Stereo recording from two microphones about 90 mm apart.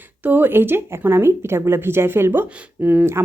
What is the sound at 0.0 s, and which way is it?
A woman's voice, 20° right (ahead or behind).